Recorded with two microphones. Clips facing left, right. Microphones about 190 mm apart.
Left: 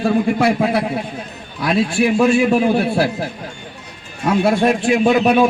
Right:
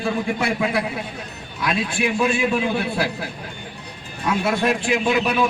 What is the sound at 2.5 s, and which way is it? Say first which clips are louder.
Speech: left 7 dB; 30° left (ahead or behind).